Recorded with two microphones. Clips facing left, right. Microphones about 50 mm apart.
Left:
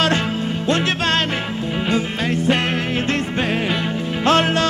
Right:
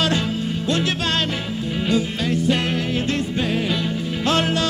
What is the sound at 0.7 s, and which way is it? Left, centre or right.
Music, left.